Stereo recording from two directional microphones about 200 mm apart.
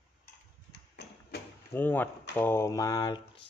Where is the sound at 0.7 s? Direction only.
55° left (ahead or behind).